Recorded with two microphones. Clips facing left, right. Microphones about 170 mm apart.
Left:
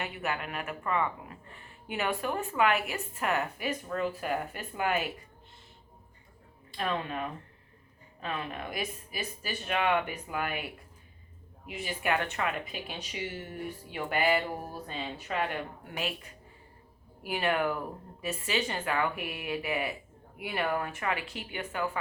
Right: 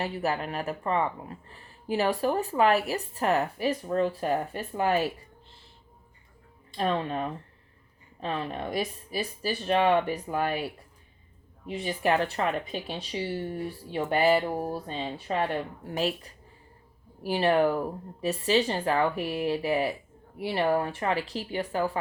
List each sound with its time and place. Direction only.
0.0 s speech: 35° right (ahead or behind)
6.7 s speech: 35° right (ahead or behind)
11.7 s speech: 35° right (ahead or behind)